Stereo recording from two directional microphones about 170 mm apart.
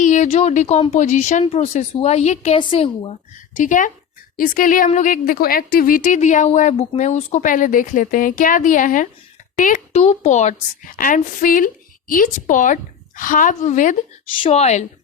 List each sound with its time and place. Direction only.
0.0 s a woman's voice: 45° left (ahead or behind)
3.3 s a woman's voice: 50° left (ahead or behind)
14.3 s a woman's voice: 30° left (ahead or behind)